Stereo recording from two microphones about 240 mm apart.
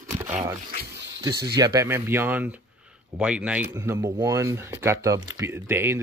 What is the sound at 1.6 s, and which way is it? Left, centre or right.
Speech, centre.